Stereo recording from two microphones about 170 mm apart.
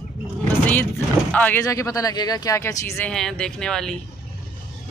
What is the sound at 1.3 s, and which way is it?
Speech, 10° left (ahead or behind).